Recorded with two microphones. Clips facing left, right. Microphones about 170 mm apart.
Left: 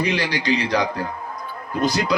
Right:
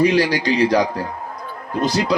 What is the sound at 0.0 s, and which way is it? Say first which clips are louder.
A man's voice: right 7 dB; 45° right (ahead or behind).